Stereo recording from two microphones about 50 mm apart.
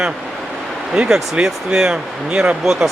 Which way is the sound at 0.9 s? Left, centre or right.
Centre.